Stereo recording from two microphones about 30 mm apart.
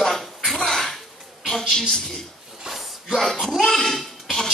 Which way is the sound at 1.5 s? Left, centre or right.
Centre.